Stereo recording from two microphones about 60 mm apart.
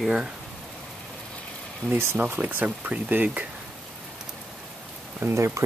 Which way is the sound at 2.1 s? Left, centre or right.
Right.